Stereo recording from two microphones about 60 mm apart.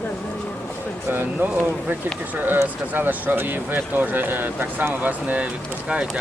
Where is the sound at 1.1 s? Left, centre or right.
Right.